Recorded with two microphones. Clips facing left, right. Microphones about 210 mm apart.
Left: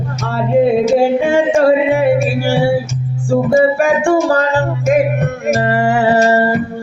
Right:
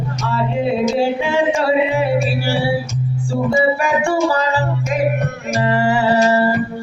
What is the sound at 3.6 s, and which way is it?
Music, 50° left (ahead or behind).